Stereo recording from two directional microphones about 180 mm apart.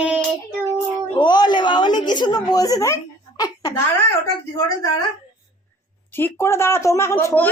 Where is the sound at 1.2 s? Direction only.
25° left (ahead or behind).